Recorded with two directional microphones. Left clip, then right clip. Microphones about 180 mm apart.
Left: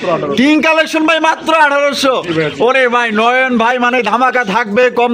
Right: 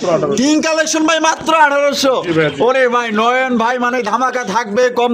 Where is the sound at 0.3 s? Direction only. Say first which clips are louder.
Left 4 dB; 10° left (ahead or behind).